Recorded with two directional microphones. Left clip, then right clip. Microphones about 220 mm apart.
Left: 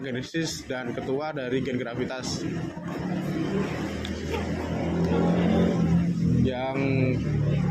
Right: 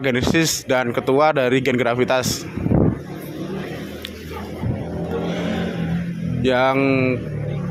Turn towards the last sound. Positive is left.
turn(degrees=-50)  # may be behind; listen again after turning